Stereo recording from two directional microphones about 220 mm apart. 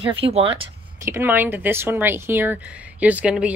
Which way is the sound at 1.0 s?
10° right (ahead or behind).